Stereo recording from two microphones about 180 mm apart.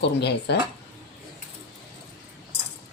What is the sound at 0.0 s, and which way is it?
Speech, 70° left (ahead or behind).